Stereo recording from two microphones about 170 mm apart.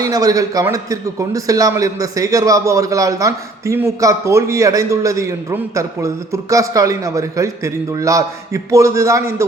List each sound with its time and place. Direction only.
0.0 s a man's voice: 20° right (ahead or behind)